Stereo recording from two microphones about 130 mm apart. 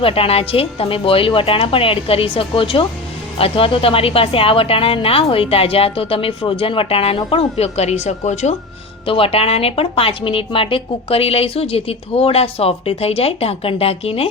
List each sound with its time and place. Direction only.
0.0 s a woman's voice: 45° left (ahead or behind)
9.0 s a woman's voice: 45° left (ahead or behind)